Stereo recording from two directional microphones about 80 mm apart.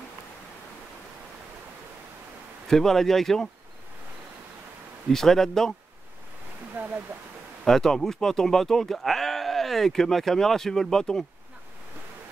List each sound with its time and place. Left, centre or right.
2.7 s speech: centre
5.1 s speech: centre
6.8 s a sound: right
7.6 s speech: centre